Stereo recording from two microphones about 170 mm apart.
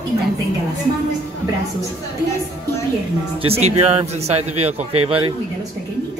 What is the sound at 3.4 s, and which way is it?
A man's voice, 35° right (ahead or behind).